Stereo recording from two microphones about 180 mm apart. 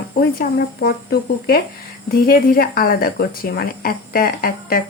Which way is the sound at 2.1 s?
55° left (ahead or behind).